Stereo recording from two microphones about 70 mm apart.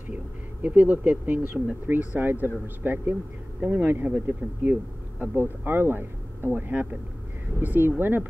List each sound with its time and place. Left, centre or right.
0.1 s speech: right